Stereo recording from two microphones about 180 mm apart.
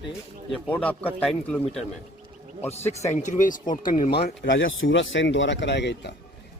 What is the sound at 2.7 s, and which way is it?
Speech, 40° left (ahead or behind).